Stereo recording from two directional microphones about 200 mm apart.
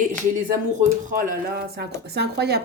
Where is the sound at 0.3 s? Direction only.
40° right (ahead or behind).